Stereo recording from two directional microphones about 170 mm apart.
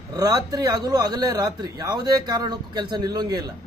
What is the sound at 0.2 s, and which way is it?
A man's voice, 20° right (ahead or behind).